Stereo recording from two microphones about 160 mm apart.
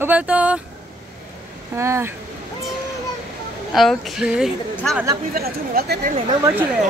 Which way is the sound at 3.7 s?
Centre (ahead or behind).